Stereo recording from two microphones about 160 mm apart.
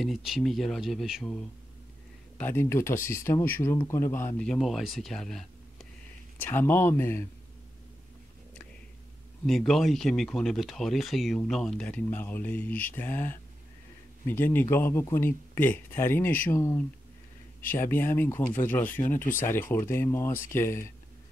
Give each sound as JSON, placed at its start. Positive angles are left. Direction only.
{"t": 0.0, "sound": "speech", "side_deg": 0}
{"t": 2.3, "sound": "speech", "side_deg": 15}
{"t": 4.5, "sound": "speech", "side_deg": 0}
{"t": 6.4, "sound": "speech", "side_deg": 15}
{"t": 9.5, "sound": "speech", "side_deg": 0}